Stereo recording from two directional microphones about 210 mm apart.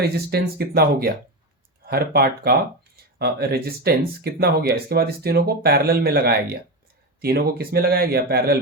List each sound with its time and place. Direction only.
0.0 s speech: 50° right (ahead or behind)